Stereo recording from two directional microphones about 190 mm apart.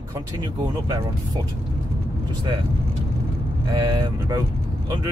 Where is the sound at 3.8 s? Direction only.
20° right (ahead or behind).